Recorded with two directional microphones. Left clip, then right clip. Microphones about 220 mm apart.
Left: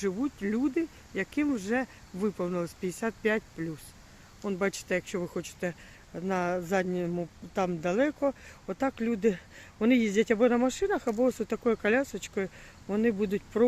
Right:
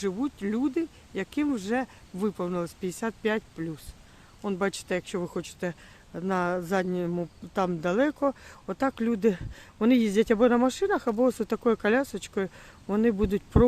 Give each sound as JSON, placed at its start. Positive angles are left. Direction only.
{"t": 0.0, "sound": "speech", "side_deg": -10}